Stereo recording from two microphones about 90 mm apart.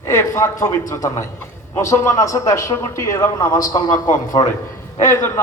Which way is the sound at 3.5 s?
45° left (ahead or behind).